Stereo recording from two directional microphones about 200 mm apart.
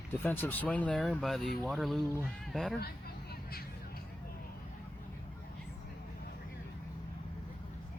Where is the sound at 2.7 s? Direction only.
50° left (ahead or behind).